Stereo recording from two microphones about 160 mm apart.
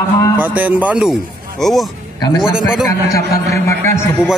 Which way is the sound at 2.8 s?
20° left (ahead or behind).